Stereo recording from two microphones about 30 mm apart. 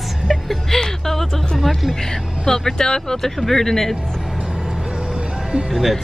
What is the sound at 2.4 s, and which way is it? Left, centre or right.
Speech, centre.